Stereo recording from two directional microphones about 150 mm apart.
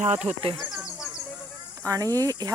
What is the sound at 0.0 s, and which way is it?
Speech, 50° right (ahead or behind).